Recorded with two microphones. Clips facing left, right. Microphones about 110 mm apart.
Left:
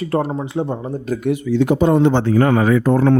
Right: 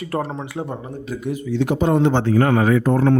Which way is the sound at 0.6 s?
10° left (ahead or behind).